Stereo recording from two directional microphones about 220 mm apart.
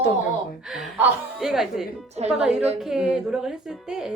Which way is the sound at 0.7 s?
Centre (ahead or behind).